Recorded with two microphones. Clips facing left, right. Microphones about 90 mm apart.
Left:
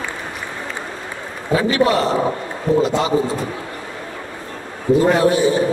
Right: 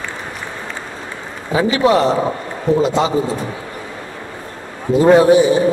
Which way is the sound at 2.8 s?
20° right (ahead or behind).